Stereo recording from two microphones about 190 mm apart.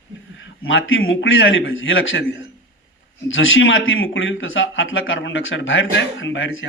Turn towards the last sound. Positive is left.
turn(degrees=80)